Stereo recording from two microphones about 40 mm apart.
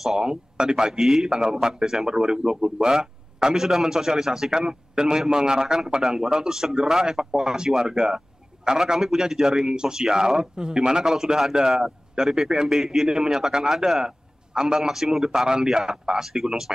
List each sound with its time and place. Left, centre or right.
0.0 s a man's voice: centre